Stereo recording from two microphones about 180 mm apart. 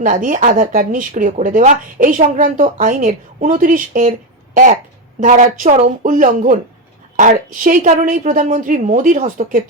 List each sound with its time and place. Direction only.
0.0 s speech: 50° right (ahead or behind)
5.2 s speech: 45° right (ahead or behind)